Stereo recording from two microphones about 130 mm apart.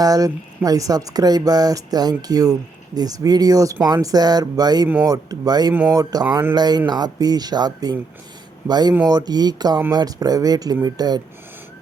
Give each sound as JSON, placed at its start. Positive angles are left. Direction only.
{"t": 0.0, "sound": "speech", "side_deg": -30}